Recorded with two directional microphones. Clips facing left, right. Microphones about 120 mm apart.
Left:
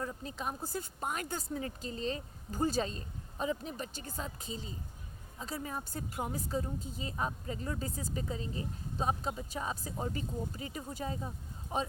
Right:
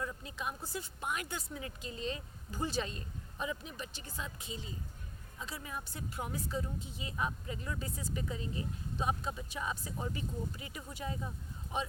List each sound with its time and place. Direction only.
0.0 s a woman's voice: 35° left (ahead or behind)